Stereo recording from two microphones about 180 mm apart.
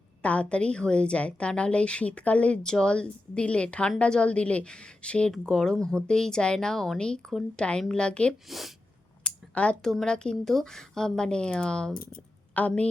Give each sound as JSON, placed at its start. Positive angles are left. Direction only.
{"t": 0.2, "sound": "a woman's voice", "side_deg": 5}